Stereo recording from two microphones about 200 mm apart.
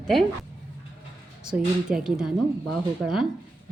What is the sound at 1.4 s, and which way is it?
A woman's voice, 5° right (ahead or behind).